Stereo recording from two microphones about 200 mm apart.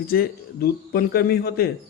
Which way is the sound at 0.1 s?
50° left (ahead or behind).